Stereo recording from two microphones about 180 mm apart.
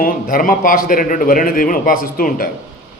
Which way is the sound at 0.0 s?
50° left (ahead or behind).